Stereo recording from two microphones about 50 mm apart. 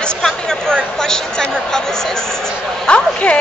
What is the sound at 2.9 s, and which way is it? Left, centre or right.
Speech, left.